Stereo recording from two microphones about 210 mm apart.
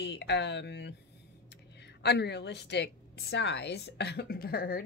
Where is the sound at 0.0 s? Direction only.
55° left (ahead or behind).